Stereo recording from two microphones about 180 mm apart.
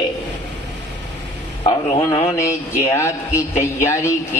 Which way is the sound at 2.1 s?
35° left (ahead or behind).